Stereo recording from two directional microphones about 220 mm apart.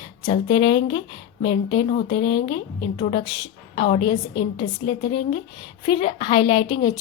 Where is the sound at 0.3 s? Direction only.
20° left (ahead or behind).